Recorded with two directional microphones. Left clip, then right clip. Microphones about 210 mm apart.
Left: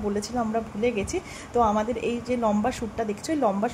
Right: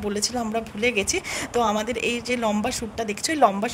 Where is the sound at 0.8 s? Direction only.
50° right (ahead or behind).